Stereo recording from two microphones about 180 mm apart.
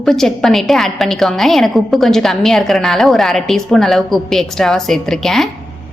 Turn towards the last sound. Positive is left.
turn(degrees=0)  # may be behind; listen again after turning